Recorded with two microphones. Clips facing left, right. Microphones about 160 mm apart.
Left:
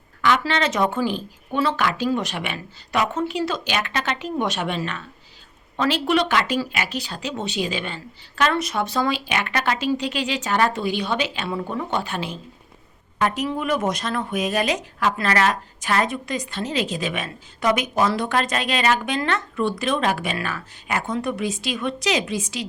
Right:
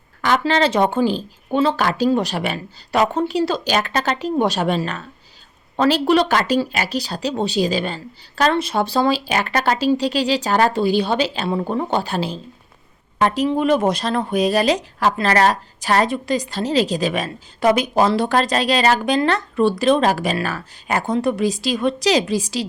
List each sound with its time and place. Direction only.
0.2 s speech: 35° right (ahead or behind)